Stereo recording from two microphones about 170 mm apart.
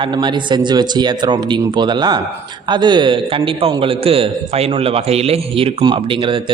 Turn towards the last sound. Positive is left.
turn(degrees=-30)  # may be behind; listen again after turning